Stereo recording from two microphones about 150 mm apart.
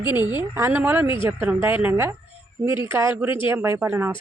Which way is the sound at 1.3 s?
10° right (ahead or behind).